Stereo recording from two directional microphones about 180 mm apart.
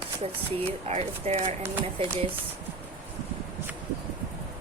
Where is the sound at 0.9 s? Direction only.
35° right (ahead or behind).